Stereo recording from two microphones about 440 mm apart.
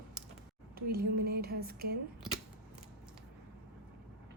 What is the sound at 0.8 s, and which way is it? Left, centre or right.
Speech, right.